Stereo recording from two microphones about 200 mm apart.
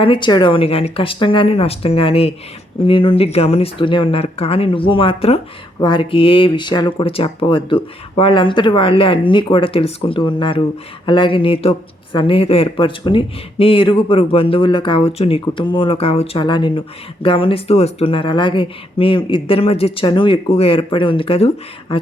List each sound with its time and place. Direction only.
0.0 s speech: 25° left (ahead or behind)